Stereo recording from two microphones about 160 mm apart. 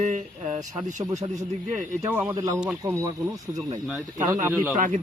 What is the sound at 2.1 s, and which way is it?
Speech, 10° right (ahead or behind).